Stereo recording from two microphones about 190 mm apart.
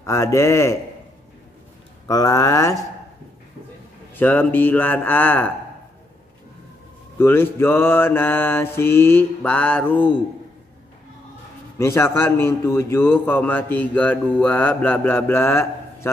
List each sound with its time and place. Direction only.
0.0 s a man's voice: 15° left (ahead or behind)
2.0 s a man's voice: 20° left (ahead or behind)
4.1 s a man's voice: 10° left (ahead or behind)
7.2 s a man's voice: 10° left (ahead or behind)
11.8 s a man's voice: 15° left (ahead or behind)